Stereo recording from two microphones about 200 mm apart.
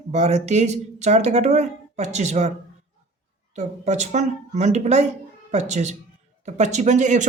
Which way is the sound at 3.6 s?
35° right (ahead or behind).